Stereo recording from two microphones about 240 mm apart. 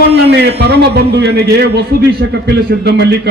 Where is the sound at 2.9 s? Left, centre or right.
Right.